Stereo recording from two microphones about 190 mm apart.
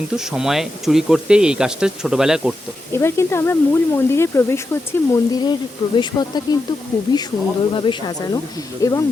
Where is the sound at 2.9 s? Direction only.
15° left (ahead or behind).